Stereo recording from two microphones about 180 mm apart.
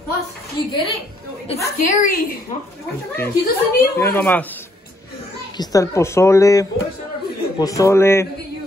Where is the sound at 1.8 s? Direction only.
45° left (ahead or behind).